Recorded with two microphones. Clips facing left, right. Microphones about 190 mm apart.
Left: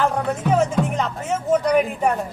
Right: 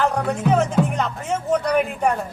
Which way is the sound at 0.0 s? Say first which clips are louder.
Right 1 dB; centre (ahead or behind).